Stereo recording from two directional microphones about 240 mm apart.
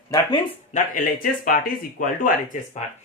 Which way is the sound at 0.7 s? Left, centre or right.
Left.